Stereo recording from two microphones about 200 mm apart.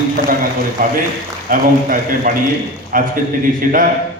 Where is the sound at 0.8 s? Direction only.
50° right (ahead or behind).